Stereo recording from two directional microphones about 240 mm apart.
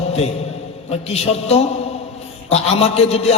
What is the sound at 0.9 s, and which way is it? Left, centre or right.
A man's voice, left.